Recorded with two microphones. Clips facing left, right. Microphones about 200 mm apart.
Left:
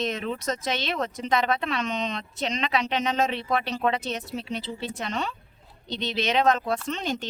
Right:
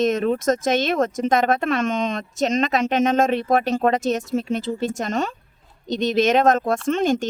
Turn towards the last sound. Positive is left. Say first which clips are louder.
# right 10 dB
turn(degrees=-50)  # may be behind; listen again after turning